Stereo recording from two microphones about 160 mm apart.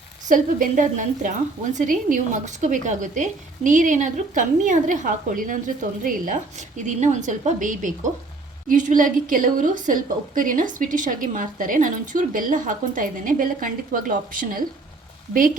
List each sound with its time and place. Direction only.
0.3 s a woman's voice: 55° right (ahead or behind)